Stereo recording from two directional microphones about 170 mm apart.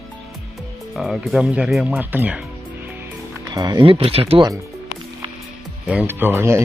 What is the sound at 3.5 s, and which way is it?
Speech, 25° right (ahead or behind).